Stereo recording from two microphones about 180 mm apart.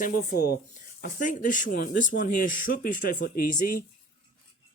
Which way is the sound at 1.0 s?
45° left (ahead or behind).